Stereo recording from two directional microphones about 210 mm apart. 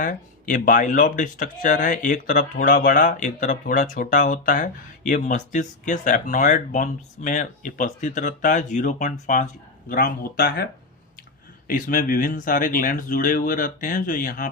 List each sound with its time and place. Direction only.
0.0 s speech: 40° left (ahead or behind)
11.7 s speech: 40° left (ahead or behind)